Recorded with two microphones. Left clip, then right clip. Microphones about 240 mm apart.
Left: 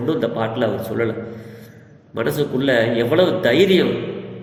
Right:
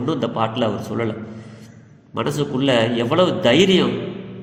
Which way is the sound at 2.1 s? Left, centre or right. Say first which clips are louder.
Left 2 dB; right.